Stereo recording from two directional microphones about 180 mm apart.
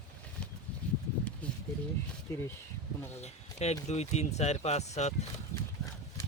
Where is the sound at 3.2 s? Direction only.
35° left (ahead or behind).